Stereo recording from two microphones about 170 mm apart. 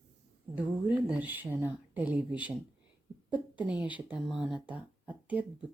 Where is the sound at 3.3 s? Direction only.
10° right (ahead or behind).